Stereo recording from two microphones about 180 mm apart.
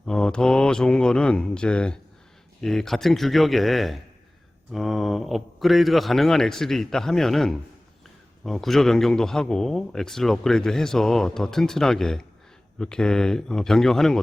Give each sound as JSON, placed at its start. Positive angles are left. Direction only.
{"t": 0.0, "sound": "a man's voice", "side_deg": 5}